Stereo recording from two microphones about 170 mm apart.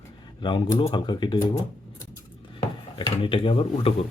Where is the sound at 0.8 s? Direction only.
25° left (ahead or behind).